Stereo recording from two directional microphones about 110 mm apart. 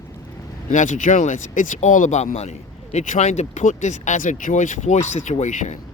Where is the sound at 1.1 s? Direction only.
90° left.